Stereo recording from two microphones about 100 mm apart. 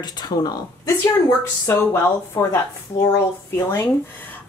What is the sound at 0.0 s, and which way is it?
Speech, 40° left (ahead or behind).